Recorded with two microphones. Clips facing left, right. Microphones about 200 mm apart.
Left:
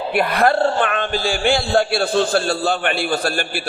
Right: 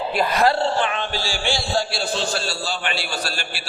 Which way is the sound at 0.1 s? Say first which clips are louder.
Left 3 dB; 60° left (ahead or behind).